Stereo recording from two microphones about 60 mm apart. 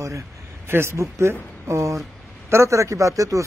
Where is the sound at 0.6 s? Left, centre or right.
Right.